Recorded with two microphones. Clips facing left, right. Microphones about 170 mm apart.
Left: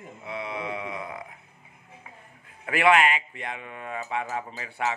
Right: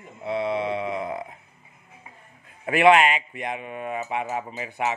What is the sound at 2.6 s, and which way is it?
Speech, 20° right (ahead or behind).